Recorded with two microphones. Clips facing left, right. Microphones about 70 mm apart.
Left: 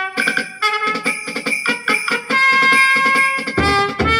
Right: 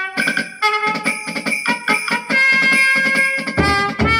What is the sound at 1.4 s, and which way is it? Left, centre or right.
Music, right.